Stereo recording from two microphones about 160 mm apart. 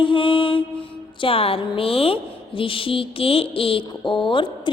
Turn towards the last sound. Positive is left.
turn(degrees=30)  # may be behind; listen again after turning